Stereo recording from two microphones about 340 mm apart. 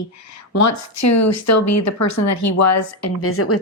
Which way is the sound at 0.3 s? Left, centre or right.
Left.